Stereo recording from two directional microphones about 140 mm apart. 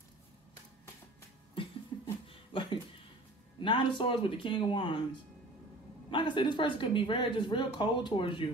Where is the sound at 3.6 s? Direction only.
35° left (ahead or behind).